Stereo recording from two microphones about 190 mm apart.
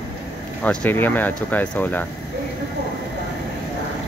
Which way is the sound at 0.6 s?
5° left (ahead or behind).